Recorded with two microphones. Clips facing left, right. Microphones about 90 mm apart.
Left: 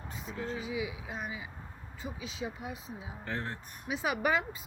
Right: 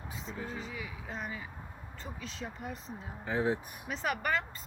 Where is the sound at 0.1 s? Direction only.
Centre (ahead or behind).